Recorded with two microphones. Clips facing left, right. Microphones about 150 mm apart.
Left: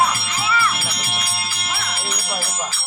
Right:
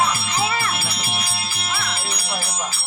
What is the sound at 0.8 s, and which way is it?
Music, centre (ahead or behind).